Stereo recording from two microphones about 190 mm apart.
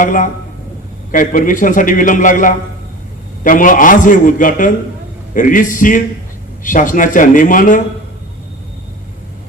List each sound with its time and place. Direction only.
0.0 s a man's voice: 40° left (ahead or behind)